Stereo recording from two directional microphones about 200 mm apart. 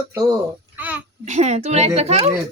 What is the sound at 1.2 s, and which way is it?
Speech, 35° right (ahead or behind).